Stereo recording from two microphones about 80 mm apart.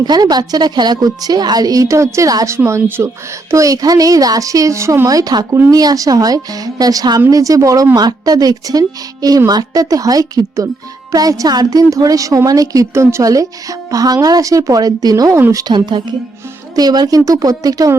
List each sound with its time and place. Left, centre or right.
0.0 s a woman's voice: right
2.6 s speech: right
3.5 s a woman's voice: right
15.5 s a woman's voice: right
16.7 s a woman's voice: right